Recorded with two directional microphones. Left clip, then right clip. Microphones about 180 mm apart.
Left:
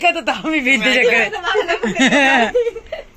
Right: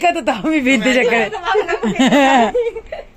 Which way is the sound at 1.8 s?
15° right (ahead or behind).